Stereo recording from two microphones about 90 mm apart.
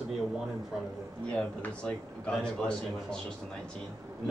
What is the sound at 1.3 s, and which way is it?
A man's voice, 10° left (ahead or behind).